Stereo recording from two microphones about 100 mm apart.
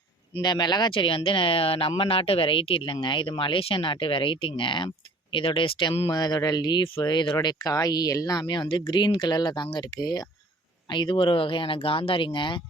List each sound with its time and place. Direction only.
0.4 s speech: 45° left (ahead or behind)
0.9 s speech: 60° left (ahead or behind)
6.1 s speech: 45° left (ahead or behind)